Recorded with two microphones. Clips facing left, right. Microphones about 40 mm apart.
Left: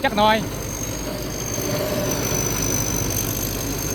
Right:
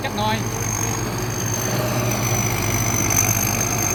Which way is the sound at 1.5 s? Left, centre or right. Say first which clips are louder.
Left 1 dB; right.